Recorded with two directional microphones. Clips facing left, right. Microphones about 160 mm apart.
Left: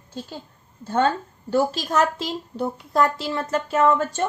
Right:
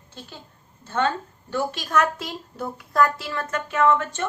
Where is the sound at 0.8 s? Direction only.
35° left (ahead or behind).